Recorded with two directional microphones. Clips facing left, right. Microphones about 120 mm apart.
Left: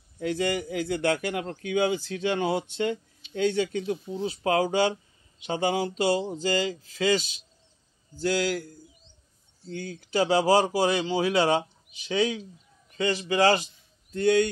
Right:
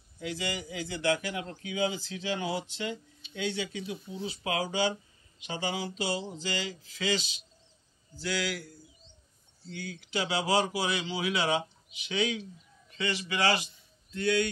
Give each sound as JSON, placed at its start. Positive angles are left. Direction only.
{"t": 0.2, "sound": "speech", "side_deg": 50}
{"t": 9.7, "sound": "speech", "side_deg": 45}